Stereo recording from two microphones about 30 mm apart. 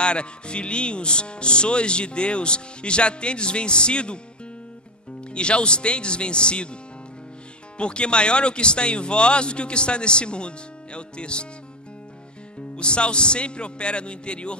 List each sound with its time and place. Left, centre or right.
0.0 s speech: left
5.3 s speech: left
12.7 s speech: left